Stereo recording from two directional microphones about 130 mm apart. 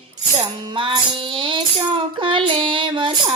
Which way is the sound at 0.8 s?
40° right (ahead or behind).